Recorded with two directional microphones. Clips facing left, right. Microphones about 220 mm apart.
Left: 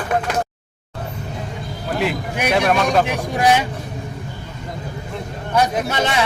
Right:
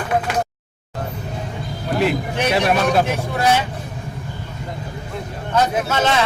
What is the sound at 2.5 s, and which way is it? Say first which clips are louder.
Speech: left 1 dB; 5° right (ahead or behind).